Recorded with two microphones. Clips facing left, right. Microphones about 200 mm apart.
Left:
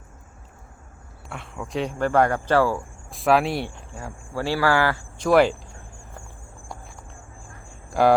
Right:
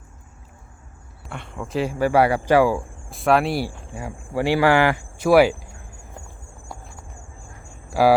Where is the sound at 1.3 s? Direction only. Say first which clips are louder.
Right 2 dB; centre (ahead or behind).